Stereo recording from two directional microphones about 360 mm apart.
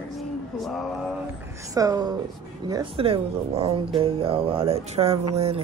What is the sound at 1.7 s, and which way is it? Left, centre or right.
Speech, centre.